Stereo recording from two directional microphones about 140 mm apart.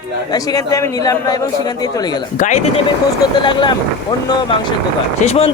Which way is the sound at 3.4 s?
35° left (ahead or behind).